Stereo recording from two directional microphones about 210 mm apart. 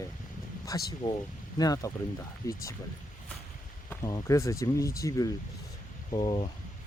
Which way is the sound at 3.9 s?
15° left (ahead or behind).